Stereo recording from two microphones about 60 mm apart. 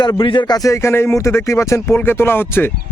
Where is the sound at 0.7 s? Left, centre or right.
Left.